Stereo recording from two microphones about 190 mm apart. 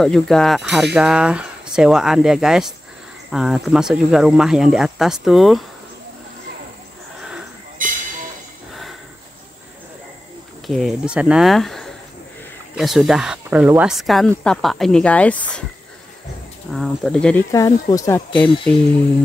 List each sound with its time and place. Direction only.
0.0 s speech: centre (ahead or behind)
7.8 s train: 45° right (ahead or behind)
10.7 s speech: centre (ahead or behind)
16.7 s speech: centre (ahead or behind)
17.5 s speech: 20° left (ahead or behind)